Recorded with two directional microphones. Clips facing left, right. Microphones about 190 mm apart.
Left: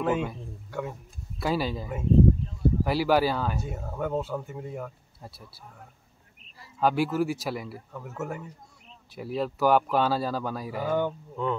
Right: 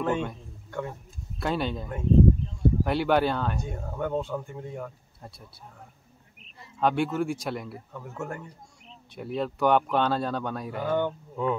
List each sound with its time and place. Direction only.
0.0 s a sound: 5° left (ahead or behind)
1.4 s speech: 5° left (ahead or behind)
6.8 s speech: 5° left (ahead or behind)